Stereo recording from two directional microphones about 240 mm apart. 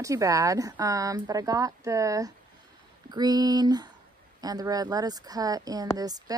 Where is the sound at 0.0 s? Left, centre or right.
Centre.